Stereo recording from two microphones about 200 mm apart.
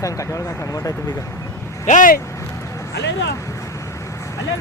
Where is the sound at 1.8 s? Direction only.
40° left (ahead or behind).